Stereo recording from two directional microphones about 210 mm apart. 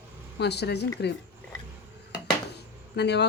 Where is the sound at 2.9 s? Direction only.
55° left (ahead or behind).